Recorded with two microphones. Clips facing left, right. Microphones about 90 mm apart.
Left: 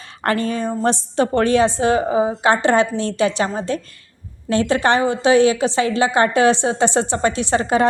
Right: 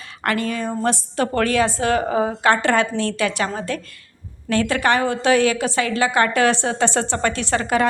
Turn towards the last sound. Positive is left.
turn(degrees=25)  # may be behind; listen again after turning